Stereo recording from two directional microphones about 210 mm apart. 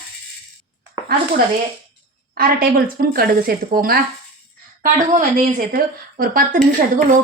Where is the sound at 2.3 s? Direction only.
45° right (ahead or behind).